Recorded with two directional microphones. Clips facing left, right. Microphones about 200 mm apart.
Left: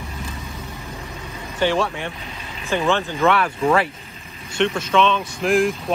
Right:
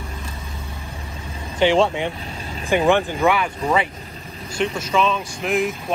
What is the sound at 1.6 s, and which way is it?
Speech, 15° right (ahead or behind).